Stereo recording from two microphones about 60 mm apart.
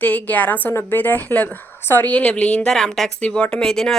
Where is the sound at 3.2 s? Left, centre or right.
Centre.